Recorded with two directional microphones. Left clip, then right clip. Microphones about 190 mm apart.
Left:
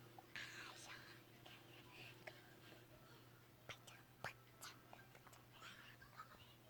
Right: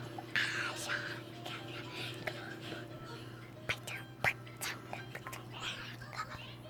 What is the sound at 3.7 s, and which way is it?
Music, 5° right (ahead or behind).